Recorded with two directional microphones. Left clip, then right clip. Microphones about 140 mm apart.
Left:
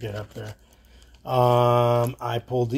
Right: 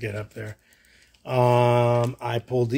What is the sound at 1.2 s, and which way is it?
A man's voice, 40° right (ahead or behind).